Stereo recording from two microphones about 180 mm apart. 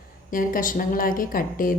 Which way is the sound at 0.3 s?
50° left (ahead or behind).